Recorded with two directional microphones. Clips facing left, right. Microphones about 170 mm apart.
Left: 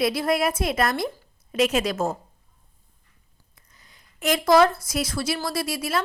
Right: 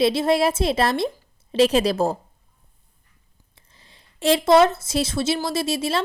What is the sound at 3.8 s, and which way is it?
Speech, 30° right (ahead or behind).